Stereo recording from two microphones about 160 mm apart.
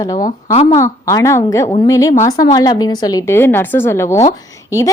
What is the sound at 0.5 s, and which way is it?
Speech, 35° left (ahead or behind).